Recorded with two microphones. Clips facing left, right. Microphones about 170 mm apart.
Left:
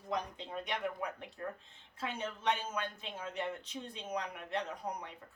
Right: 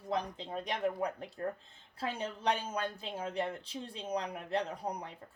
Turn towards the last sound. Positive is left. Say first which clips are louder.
# right 2 dB
turn(degrees=-30)  # may be behind; listen again after turning